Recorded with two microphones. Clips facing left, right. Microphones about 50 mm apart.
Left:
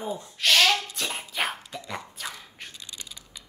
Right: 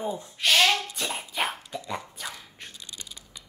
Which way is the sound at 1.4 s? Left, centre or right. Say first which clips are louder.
Even; centre.